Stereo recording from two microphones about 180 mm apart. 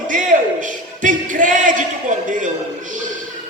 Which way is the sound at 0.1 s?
45° right (ahead or behind).